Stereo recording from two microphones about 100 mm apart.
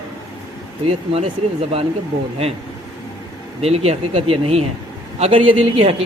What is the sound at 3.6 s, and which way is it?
A man's voice, 90° right.